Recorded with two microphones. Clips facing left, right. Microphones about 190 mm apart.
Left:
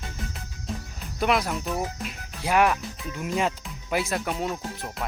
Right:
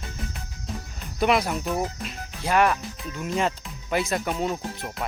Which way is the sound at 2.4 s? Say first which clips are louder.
Even; 10° left (ahead or behind).